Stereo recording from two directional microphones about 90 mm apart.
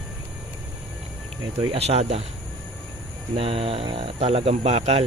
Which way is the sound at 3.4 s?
90° right.